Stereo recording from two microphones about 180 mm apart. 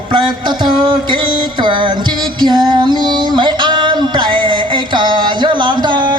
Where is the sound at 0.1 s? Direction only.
25° right (ahead or behind).